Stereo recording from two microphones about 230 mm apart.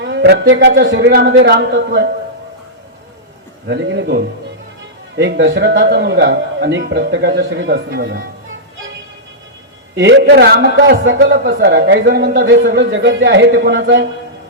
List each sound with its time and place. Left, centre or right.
0.0 s a man's voice: right
3.7 s a man's voice: right
9.9 s a man's voice: right